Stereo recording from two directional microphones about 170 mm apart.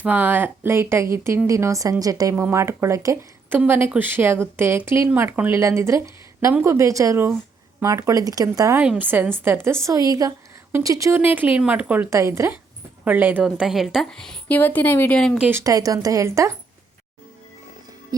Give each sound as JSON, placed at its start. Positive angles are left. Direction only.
{"t": 0.0, "sound": "a woman's voice", "side_deg": -10}
{"t": 15.4, "sound": "speech", "side_deg": -15}